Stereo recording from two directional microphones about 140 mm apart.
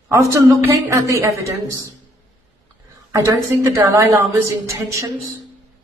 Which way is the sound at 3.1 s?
20° right (ahead or behind).